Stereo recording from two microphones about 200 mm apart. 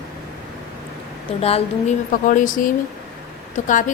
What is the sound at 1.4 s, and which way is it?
Speech, 30° left (ahead or behind).